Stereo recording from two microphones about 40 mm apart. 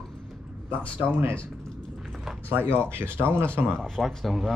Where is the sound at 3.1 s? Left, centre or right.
Right.